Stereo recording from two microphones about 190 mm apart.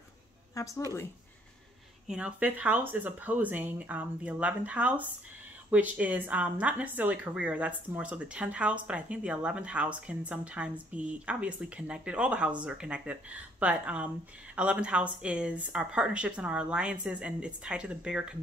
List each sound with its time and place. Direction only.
0.6 s speech: 15° left (ahead or behind)
2.0 s speech: 5° right (ahead or behind)